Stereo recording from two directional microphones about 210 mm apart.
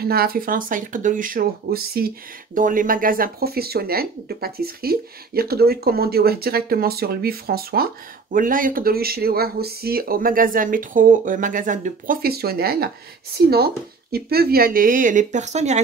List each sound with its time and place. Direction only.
0.0 s speech: 45° right (ahead or behind)